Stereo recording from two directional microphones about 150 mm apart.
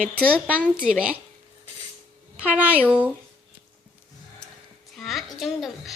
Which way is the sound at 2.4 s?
10° right (ahead or behind).